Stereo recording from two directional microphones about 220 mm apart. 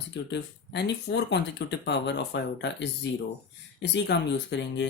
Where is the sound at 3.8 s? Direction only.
50° left (ahead or behind).